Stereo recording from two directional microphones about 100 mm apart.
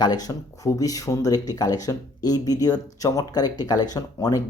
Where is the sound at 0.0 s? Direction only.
40° left (ahead or behind).